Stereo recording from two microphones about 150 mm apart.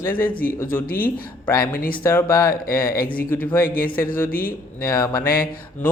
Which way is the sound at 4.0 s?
20° left (ahead or behind).